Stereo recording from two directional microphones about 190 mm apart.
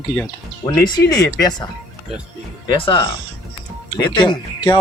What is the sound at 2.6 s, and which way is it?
Speech, 25° left (ahead or behind).